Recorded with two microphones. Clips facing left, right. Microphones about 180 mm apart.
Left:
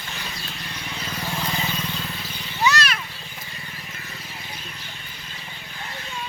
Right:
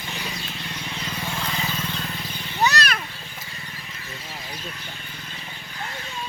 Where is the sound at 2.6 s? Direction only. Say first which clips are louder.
Even; 40° right (ahead or behind).